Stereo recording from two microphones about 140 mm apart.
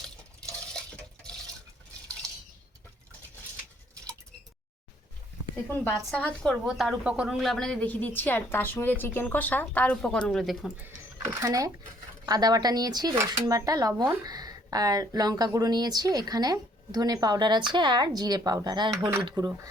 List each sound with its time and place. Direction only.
6.1 s a woman's voice: 5° left (ahead or behind)
10.8 s speech: 15° right (ahead or behind)